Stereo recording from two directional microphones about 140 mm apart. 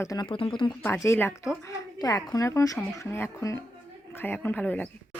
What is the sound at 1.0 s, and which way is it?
A woman's voice, 20° left (ahead or behind).